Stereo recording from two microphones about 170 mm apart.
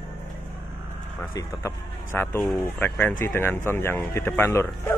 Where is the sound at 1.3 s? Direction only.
15° left (ahead or behind).